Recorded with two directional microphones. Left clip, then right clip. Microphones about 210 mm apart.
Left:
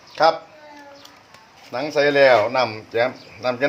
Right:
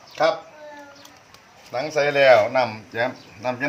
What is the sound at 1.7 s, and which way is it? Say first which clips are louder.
A man's voice: left 3 dB; 35° left (ahead or behind).